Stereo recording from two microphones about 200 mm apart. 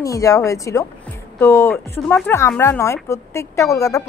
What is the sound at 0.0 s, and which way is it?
A woman's voice, 15° left (ahead or behind).